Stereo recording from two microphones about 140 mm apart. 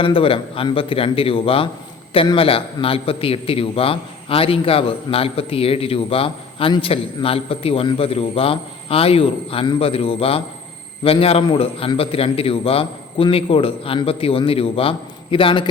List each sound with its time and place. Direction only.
0.0 s a man's voice: 40° left (ahead or behind)